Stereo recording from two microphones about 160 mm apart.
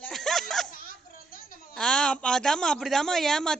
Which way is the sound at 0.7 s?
60° left (ahead or behind).